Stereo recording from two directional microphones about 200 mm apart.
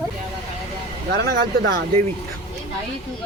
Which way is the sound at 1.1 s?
55° right (ahead or behind).